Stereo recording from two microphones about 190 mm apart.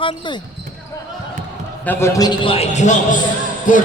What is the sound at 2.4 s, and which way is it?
Speech, 35° left (ahead or behind).